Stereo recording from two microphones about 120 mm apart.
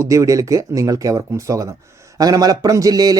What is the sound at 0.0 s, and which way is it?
Speech, 25° right (ahead or behind).